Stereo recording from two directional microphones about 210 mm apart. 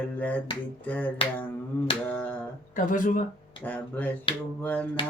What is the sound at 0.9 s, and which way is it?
Speech, 5° left (ahead or behind).